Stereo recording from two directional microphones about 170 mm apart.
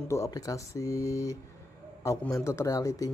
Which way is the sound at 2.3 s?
15° left (ahead or behind).